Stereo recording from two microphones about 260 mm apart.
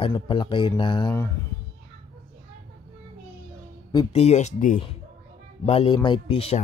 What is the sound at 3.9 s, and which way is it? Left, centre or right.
Speech, left.